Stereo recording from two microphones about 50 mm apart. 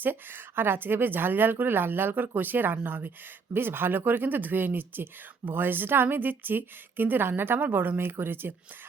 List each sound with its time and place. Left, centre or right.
0.0 s speech: right